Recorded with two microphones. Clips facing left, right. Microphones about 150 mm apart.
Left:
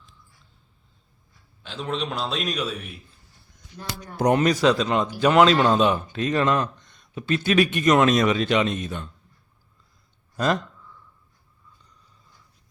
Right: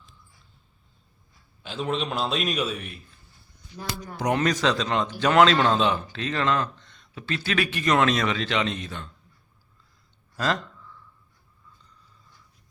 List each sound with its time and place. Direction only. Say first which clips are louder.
1.6 s a man's voice: right 1 dB; 5° right (ahead or behind)
4.4 s a man's voice: left 2 dB; 10° left (ahead or behind)
10.3 s speech: left 3 dB; 15° left (ahead or behind)